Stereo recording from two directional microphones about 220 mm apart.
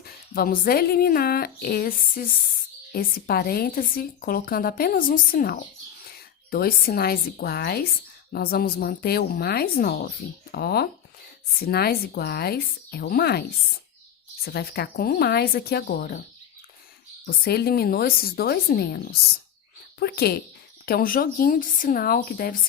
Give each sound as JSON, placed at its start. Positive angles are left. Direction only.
{"t": 0.0, "sound": "a woman's voice", "side_deg": 40}
{"t": 14.4, "sound": "speech", "side_deg": 45}
{"t": 17.2, "sound": "a woman's voice", "side_deg": 45}